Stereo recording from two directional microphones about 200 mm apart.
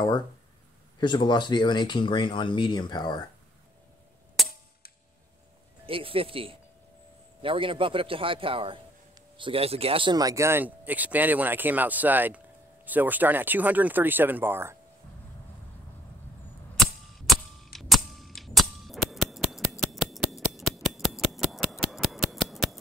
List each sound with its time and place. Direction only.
0.9 s speech: 20° left (ahead or behind)
4.4 s cap gun: centre (ahead or behind)
5.9 s a man's voice: 25° right (ahead or behind); by 14.8 s 10° right (ahead or behind)
16.7 s cap gun: centre (ahead or behind)
19.8 s a sound: centre (ahead or behind)